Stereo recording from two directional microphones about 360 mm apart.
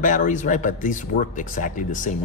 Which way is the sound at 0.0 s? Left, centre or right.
Left.